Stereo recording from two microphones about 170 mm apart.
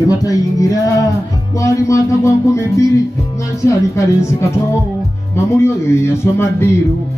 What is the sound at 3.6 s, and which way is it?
Speech, 20° left (ahead or behind).